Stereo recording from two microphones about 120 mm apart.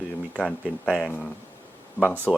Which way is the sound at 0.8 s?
Centre (ahead or behind).